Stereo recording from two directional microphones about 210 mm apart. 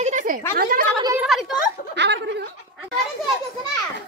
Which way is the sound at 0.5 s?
45° right (ahead or behind).